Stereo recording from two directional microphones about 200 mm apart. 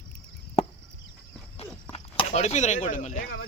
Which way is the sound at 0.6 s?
30° left (ahead or behind).